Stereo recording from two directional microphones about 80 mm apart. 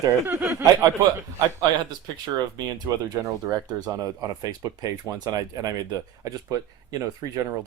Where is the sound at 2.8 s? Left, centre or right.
Right.